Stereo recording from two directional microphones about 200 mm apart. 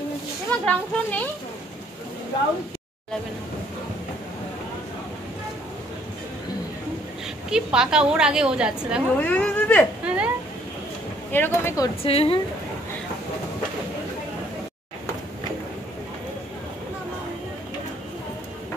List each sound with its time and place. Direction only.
0.5 s speech: 5° left (ahead or behind)
7.5 s a woman's voice: 5° right (ahead or behind)
9.2 s speech: 10° left (ahead or behind)
10.0 s whimper: 5° right (ahead or behind)
11.3 s speech: 10° left (ahead or behind)
12.0 s speech: 30° left (ahead or behind)